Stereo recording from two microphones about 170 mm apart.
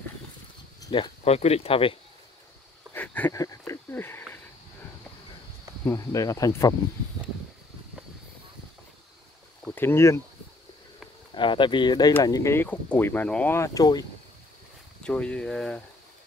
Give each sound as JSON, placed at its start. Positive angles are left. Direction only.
{"t": 0.7, "sound": "a sound", "side_deg": 25}
{"t": 1.2, "sound": "speech", "side_deg": 40}
{"t": 2.9, "sound": "a sound", "side_deg": 10}
{"t": 5.9, "sound": "speech", "side_deg": 20}
{"t": 9.7, "sound": "speech", "side_deg": 15}
{"t": 11.3, "sound": "speech", "side_deg": 30}
{"t": 15.0, "sound": "speech", "side_deg": 5}